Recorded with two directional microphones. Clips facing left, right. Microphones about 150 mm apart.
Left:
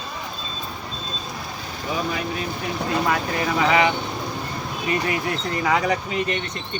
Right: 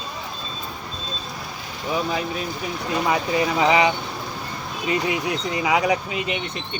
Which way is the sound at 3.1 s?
10° right (ahead or behind).